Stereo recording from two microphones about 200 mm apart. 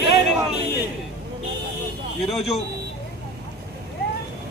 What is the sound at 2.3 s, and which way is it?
Speech, 30° left (ahead or behind).